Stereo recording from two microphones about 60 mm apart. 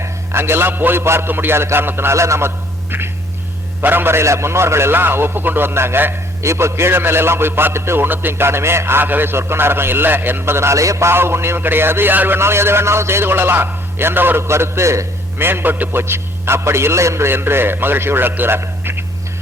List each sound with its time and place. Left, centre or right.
0.0 s a man's voice: right
3.8 s a man's voice: right
12.4 s a man's voice: right
14.4 s a man's voice: right
15.4 s a man's voice: right